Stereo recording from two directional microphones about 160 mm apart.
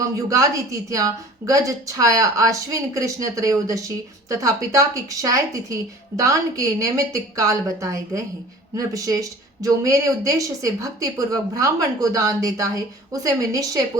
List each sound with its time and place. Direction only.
0.3 s a woman's voice: 20° right (ahead or behind)